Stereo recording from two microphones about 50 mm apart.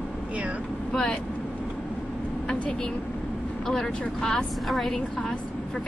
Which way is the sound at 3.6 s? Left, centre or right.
Centre.